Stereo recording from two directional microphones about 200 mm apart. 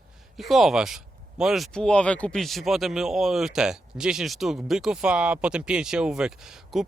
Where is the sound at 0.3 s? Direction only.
Centre (ahead or behind).